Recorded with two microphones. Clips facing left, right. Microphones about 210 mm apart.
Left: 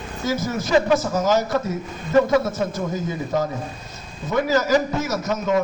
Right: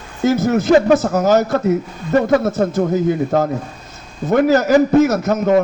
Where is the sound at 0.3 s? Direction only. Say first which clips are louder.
Right 9 dB; 60° right (ahead or behind).